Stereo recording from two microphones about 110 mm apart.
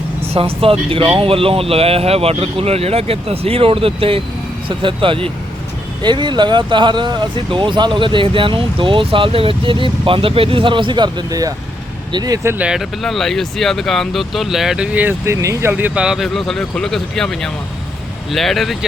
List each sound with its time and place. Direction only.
0.2 s speech: 60° right (ahead or behind); by 12.5 s 35° right (ahead or behind)
12.5 s speech: 10° right (ahead or behind)
14.9 s speech: 20° right (ahead or behind)
15.7 s speech: 10° right (ahead or behind)